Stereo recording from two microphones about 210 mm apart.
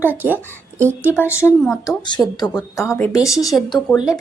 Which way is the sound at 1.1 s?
10° left (ahead or behind).